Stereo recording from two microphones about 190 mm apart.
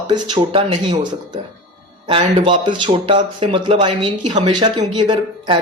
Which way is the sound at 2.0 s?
30° right (ahead or behind).